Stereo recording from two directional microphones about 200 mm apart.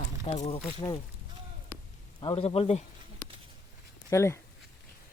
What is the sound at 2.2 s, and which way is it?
Speech, 25° left (ahead or behind).